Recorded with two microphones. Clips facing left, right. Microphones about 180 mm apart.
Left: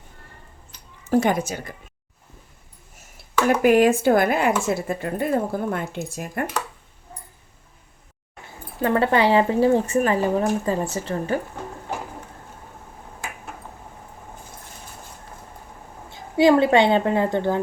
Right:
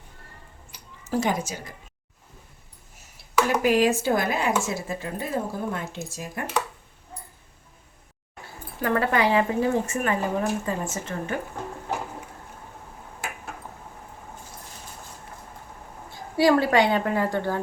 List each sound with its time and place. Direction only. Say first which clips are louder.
1.1 s speech: left 5 dB; 55° left (ahead or behind)
3.5 s speech: left 6 dB; 55° left (ahead or behind)
8.8 s speech: left 4 dB; 25° left (ahead or behind)
16.4 s a woman's voice: left 4 dB; 20° left (ahead or behind)